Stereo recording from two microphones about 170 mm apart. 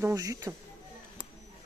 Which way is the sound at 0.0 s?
20° right (ahead or behind).